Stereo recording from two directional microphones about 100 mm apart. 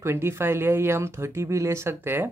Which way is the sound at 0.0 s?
25° right (ahead or behind).